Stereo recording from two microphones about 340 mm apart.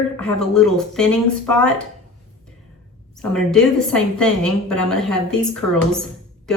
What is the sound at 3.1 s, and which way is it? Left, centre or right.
A woman's voice, centre.